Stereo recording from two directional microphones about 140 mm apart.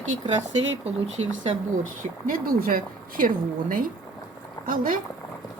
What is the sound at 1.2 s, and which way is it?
Speech, 50° right (ahead or behind).